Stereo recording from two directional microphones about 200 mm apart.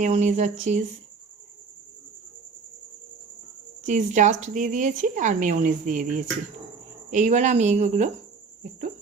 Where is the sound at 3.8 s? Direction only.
40° right (ahead or behind).